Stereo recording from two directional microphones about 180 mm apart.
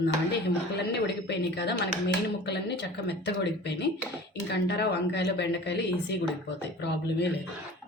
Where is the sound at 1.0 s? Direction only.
70° left (ahead or behind).